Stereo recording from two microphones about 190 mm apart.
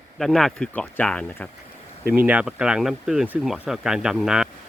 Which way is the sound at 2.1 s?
5° right (ahead or behind).